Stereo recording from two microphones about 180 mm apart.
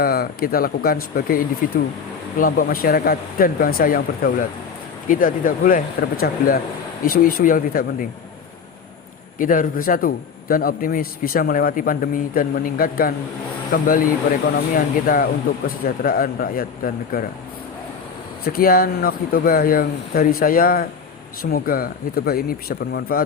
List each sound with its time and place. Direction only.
0.0 s a man's voice: 55° left (ahead or behind)
9.4 s a man's voice: 50° left (ahead or behind)
18.4 s speech: 55° left (ahead or behind)